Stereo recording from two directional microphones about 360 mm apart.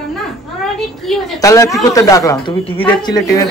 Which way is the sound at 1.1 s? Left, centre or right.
Centre.